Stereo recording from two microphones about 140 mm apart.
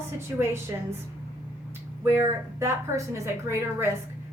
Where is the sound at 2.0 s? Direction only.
20° right (ahead or behind).